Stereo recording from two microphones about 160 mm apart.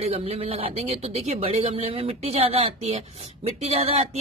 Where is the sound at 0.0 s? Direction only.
40° right (ahead or behind).